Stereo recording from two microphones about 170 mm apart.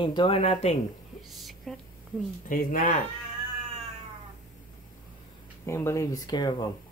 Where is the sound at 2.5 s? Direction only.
55° left (ahead or behind).